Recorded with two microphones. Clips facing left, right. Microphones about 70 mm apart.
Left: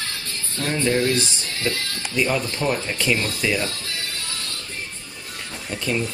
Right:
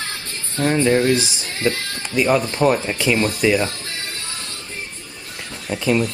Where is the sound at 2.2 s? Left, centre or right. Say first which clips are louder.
Right 6 dB; centre.